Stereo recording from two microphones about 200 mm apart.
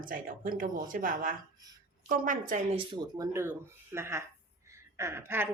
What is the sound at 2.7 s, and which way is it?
A woman's voice, 25° right (ahead or behind).